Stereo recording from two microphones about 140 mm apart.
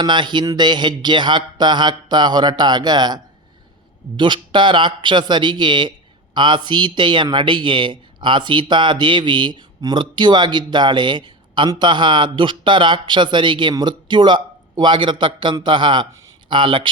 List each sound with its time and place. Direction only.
0.0 s a man's voice: 35° right (ahead or behind)
4.2 s a man's voice: 35° right (ahead or behind)